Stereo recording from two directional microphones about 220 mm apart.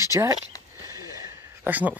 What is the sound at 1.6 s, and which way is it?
Speech, 5° right (ahead or behind).